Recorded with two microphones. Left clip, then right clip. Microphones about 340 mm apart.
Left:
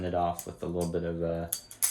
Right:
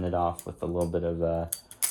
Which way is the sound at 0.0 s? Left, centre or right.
Centre.